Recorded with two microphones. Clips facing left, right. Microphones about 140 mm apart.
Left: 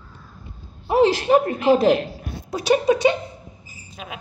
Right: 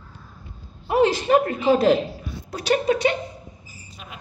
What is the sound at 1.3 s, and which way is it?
A woman's voice, 20° left (ahead or behind).